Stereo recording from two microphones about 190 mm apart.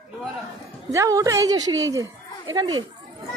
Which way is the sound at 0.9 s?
15° right (ahead or behind).